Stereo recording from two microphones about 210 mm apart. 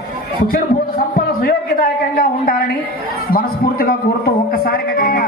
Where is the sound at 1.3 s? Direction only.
45° left (ahead or behind).